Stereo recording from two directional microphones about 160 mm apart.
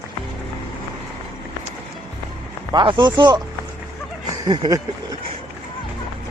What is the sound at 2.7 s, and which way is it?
Speech, 25° right (ahead or behind).